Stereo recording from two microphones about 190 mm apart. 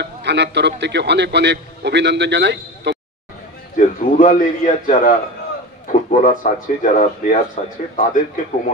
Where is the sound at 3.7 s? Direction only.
45° left (ahead or behind).